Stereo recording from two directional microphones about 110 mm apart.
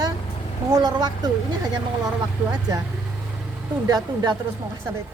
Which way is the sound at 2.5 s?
35° right (ahead or behind).